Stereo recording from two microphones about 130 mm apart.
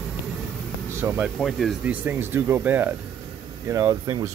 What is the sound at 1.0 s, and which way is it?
Speech, 20° right (ahead or behind).